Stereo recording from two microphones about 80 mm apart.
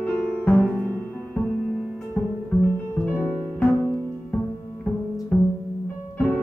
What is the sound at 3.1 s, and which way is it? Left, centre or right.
Music, left.